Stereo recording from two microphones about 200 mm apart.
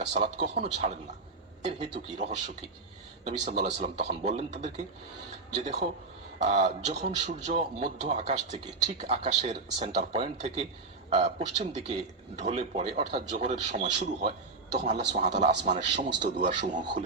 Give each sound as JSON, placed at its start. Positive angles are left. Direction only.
{"t": 0.1, "sound": "a man's voice", "side_deg": -35}
{"t": 3.6, "sound": "a man's voice", "side_deg": -35}